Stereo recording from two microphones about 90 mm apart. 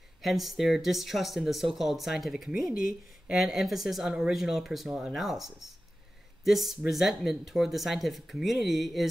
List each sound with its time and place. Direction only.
0.2 s speech: 5° right (ahead or behind)